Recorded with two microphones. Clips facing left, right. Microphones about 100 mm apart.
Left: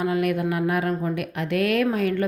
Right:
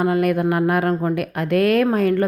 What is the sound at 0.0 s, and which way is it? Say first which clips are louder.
A woman's voice: right 5 dB; 45° right (ahead or behind).